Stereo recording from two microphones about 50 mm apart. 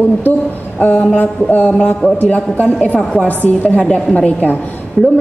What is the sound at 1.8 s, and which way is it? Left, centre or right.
A woman's voice, left.